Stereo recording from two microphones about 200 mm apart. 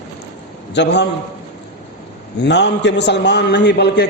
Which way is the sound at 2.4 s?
60° left (ahead or behind).